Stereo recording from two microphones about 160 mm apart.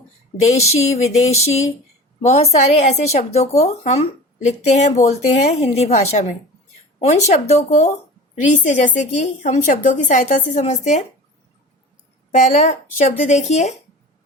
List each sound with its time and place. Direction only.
1.2 s a woman's voice: 45° left (ahead or behind)
12.3 s a woman's voice: 50° left (ahead or behind)